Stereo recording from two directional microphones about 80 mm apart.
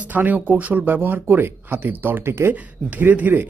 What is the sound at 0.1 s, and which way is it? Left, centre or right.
Speech, right.